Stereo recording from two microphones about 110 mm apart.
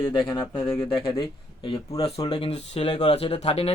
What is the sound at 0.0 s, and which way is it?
Speech, 50° left (ahead or behind).